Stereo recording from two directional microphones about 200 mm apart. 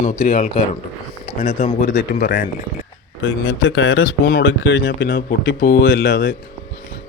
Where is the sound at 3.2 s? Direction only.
85° left.